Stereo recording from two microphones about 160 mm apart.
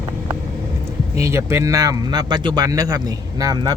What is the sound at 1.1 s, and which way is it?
Speech, 15° right (ahead or behind).